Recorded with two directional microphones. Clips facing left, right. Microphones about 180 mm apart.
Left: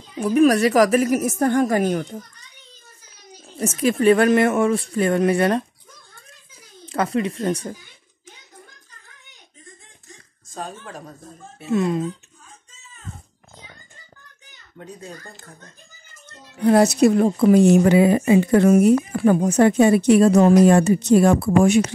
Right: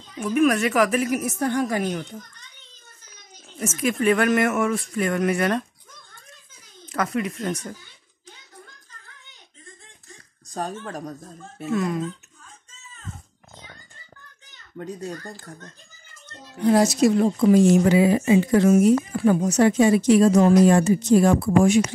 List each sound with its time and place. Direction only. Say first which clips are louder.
0.2 s a woman's voice: left 4 dB; 35° left (ahead or behind)
3.4 s a woman's voice: left 4 dB; 35° left (ahead or behind)
6.9 s speech: left 3 dB; 30° left (ahead or behind)
10.5 s speech: right 3 dB; 40° right (ahead or behind)
11.7 s speech: left 4 dB; 25° left (ahead or behind)
16.6 s a woman's voice: left 3 dB; 60° left (ahead or behind)